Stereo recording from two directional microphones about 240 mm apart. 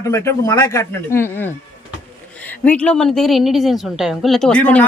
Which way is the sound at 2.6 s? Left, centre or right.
Centre.